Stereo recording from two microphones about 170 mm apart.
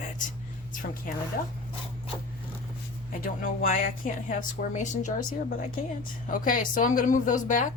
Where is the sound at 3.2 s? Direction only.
55° left (ahead or behind).